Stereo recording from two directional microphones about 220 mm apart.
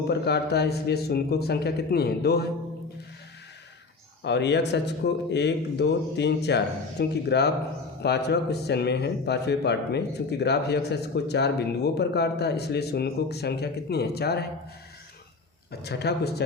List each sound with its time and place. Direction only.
0.1 s a man's voice: 50° left (ahead or behind)
4.2 s a man's voice: 50° left (ahead or behind)
15.7 s a man's voice: 50° left (ahead or behind)